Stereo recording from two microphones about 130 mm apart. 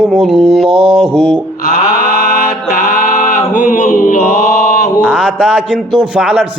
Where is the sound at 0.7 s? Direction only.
45° right (ahead or behind).